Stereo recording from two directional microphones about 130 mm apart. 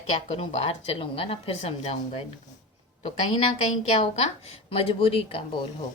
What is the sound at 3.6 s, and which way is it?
A woman's voice, 55° left (ahead or behind).